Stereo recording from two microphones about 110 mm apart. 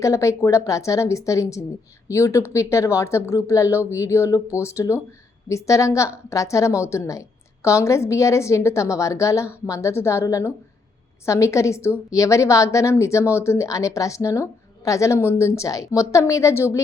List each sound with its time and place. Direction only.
0.0 s a woman's voice: 30° left (ahead or behind)